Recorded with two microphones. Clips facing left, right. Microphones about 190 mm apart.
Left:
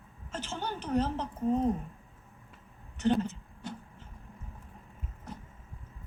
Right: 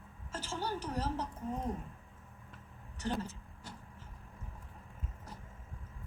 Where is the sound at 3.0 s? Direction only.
25° left (ahead or behind).